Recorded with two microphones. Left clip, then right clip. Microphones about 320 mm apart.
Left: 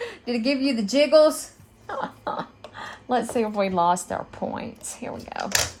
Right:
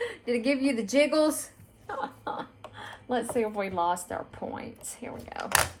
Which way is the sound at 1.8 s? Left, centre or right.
Left.